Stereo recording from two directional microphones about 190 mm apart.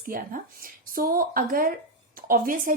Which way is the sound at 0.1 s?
50° right (ahead or behind).